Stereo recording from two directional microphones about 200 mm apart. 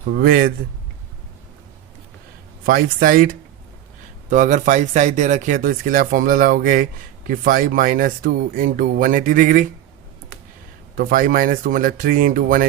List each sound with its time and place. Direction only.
0.2 s speech: 45° right (ahead or behind)
2.6 s speech: 45° right (ahead or behind)
10.9 s speech: 45° right (ahead or behind)